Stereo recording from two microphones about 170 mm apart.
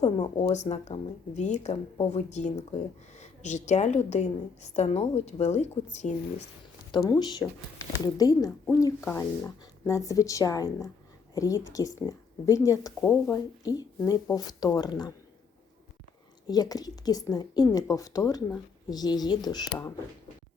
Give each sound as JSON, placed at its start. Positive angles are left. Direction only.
{"t": 0.0, "sound": "speech", "side_deg": 35}
{"t": 6.9, "sound": "a woman's voice", "side_deg": 25}
{"t": 16.5, "sound": "a woman's voice", "side_deg": 20}